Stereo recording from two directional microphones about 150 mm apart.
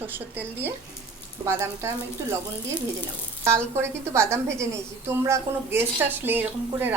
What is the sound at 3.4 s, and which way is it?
A woman's voice, 15° right (ahead or behind).